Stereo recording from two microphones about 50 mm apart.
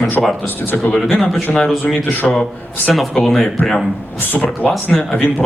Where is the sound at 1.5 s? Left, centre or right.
Centre.